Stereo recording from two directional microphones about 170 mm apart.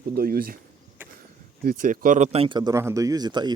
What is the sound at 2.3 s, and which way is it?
A man's voice, 30° right (ahead or behind).